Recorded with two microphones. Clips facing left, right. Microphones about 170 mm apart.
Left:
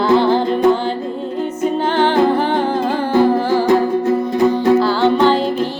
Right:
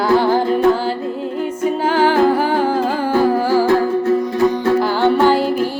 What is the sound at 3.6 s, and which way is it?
Music, 15° left (ahead or behind).